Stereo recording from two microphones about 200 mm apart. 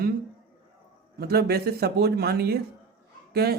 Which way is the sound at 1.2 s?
50° right (ahead or behind).